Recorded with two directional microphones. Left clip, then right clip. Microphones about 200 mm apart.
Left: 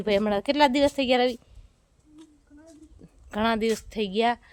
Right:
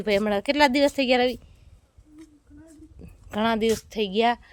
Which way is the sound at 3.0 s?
10° right (ahead or behind).